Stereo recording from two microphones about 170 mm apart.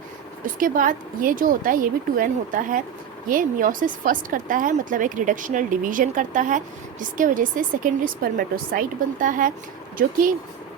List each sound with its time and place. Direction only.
0.4 s a woman's voice: 55° right (ahead or behind)